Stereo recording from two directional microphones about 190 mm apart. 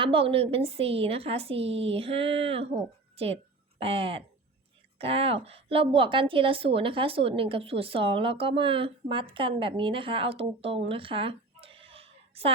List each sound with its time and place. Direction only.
0.0 s a woman's voice: 30° right (ahead or behind)